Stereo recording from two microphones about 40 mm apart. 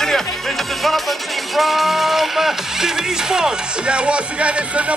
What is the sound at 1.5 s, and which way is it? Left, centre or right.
Speech, centre.